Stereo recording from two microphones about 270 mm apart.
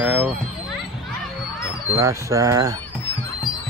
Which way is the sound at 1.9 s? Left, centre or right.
Centre.